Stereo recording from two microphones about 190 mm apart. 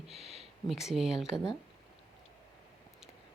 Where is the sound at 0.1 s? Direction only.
Centre (ahead or behind).